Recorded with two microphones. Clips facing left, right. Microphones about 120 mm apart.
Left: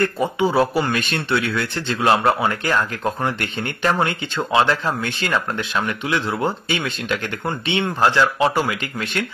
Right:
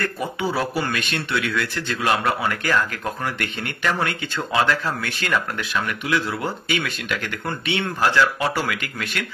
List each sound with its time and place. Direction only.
0.0 s speech: 25° left (ahead or behind)